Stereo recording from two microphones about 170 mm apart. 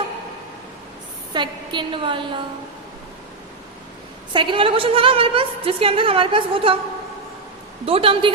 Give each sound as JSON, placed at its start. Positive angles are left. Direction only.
{"t": 1.3, "sound": "a woman's voice", "side_deg": -25}
{"t": 4.3, "sound": "a woman's voice", "side_deg": -30}
{"t": 7.9, "sound": "a woman's voice", "side_deg": -35}